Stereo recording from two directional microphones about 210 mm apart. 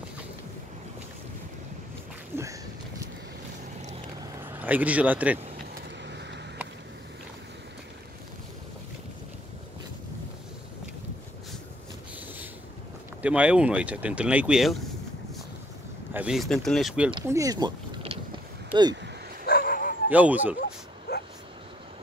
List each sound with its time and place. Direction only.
4.2 s vehicle: 10° right (ahead or behind)
6.0 s vehicle: 55° right (ahead or behind)
13.2 s speech: 5° right (ahead or behind)
16.1 s speech: 5° right (ahead or behind)
17.1 s boat: 15° right (ahead or behind)
18.7 s speech: 20° right (ahead or behind)
19.4 s dog: 45° left (ahead or behind)
20.1 s speech: 10° right (ahead or behind)
21.1 s dog: 50° left (ahead or behind)